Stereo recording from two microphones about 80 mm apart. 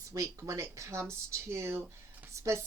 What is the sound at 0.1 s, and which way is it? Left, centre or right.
A woman's voice, right.